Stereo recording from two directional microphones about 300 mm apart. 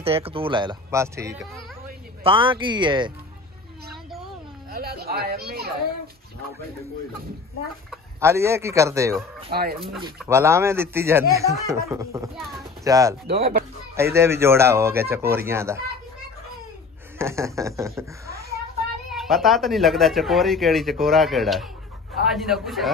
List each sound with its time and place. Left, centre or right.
0.0 s speech: centre
4.6 s a sound: right
7.9 s speech: centre
9.5 s speech: right
10.1 s speech: centre
13.4 s speech: right
13.9 s speech: centre
17.2 s speech: centre